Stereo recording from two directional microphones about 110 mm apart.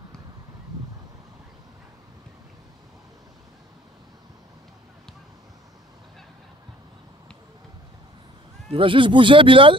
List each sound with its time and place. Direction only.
8.7 s speech: 50° right (ahead or behind)